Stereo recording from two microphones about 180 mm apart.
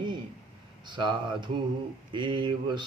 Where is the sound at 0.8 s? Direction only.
25° right (ahead or behind).